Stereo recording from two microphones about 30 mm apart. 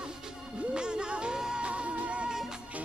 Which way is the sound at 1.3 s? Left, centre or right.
Centre.